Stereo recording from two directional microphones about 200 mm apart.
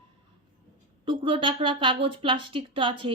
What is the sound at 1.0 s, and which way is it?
A woman's voice, 25° right (ahead or behind).